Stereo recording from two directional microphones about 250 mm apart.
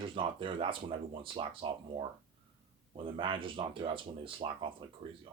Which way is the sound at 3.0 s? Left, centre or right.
Right.